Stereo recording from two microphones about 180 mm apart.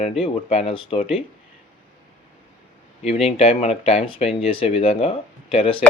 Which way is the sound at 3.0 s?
35° left (ahead or behind).